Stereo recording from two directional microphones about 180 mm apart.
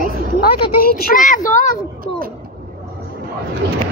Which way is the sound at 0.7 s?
55° left (ahead or behind).